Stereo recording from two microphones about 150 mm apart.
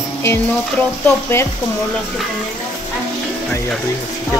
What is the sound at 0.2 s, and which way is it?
Music, 15° left (ahead or behind).